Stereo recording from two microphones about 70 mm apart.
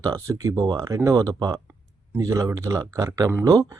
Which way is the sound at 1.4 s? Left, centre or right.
Right.